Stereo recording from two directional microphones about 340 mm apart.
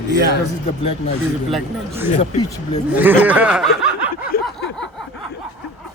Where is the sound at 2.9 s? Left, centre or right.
Centre.